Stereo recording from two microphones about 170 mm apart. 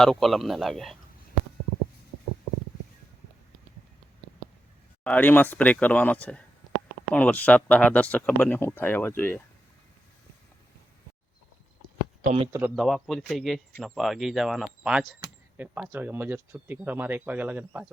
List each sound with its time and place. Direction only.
0.0 s speech: centre (ahead or behind)
5.0 s speech: 10° left (ahead or behind)
12.2 s speech: 40° right (ahead or behind)
12.7 s speech: centre (ahead or behind)